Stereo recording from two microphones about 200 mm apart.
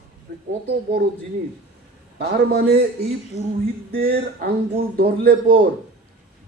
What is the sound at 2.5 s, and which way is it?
Speech, 50° right (ahead or behind).